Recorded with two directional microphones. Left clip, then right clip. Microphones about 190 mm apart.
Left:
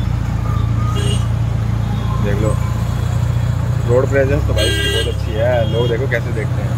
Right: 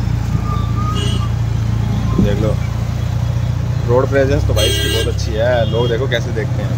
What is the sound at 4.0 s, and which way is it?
Speech, 20° right (ahead or behind).